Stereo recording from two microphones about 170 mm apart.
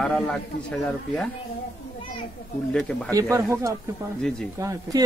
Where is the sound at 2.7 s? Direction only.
5° left (ahead or behind).